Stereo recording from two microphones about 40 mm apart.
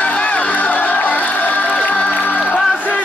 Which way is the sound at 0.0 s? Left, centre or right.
Left.